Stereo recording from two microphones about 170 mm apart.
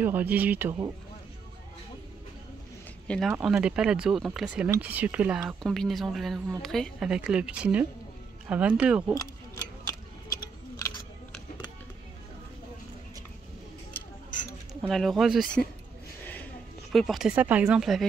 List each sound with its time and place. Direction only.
0.0 s speech: 10° right (ahead or behind)
3.1 s speech: centre (ahead or behind)
9.2 s a sound: 20° left (ahead or behind)
14.8 s speech: centre (ahead or behind)
16.9 s speech: centre (ahead or behind)